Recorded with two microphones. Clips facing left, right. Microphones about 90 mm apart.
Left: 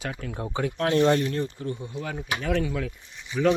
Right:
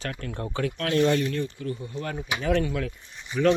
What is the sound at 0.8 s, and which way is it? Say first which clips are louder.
Speech: left 2 dB; 30° left (ahead or behind).